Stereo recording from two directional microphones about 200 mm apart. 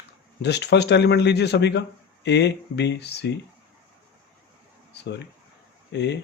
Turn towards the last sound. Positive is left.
turn(degrees=60)  # may be behind; listen again after turning